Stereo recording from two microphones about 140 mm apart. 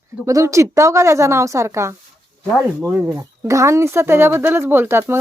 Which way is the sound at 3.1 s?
20° right (ahead or behind).